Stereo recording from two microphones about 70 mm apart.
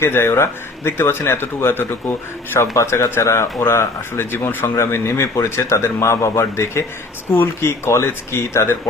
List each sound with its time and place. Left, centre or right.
0.0 s speech: left
2.7 s speech: left